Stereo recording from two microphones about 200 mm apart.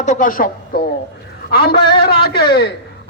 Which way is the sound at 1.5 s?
50° left (ahead or behind).